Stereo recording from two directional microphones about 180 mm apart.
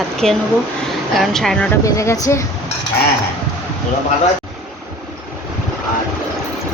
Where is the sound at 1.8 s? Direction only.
15° left (ahead or behind).